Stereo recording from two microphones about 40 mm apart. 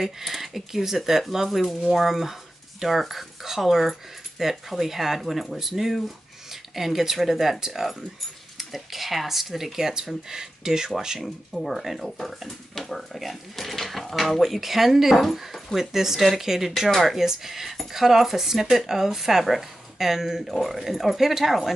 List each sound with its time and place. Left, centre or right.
0.2 s speech: centre
11.5 s speech: centre